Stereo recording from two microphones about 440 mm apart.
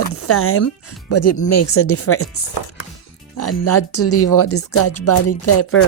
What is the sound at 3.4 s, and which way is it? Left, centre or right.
Speech, left.